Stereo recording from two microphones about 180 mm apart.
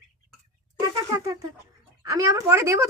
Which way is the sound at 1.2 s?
20° right (ahead or behind).